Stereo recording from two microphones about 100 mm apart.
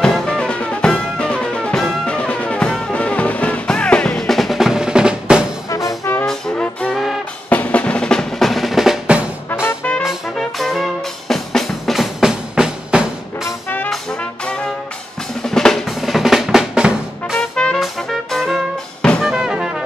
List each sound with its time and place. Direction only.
0.0 s music: 5° left (ahead or behind)
5.7 s music: 35° left (ahead or behind)
6.2 s music: 10° left (ahead or behind)
7.4 s music: 15° left (ahead or behind); by 9.2 s 5° right (ahead or behind)
9.5 s music: 25° left (ahead or behind)
10.0 s music: centre (ahead or behind)
15.4 s music: 5° left (ahead or behind)
17.4 s music: 10° left (ahead or behind)
19.2 s brass instrument: 5° right (ahead or behind)